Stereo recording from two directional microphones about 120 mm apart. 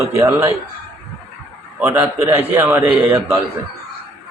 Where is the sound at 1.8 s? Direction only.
20° right (ahead or behind).